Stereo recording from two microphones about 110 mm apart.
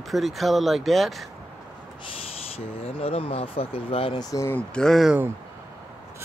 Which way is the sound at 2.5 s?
60° left (ahead or behind).